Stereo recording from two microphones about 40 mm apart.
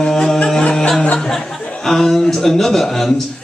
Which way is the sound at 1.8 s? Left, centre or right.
Centre.